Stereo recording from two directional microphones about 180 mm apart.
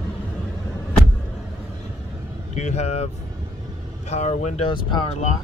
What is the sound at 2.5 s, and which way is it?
Speech, 40° left (ahead or behind).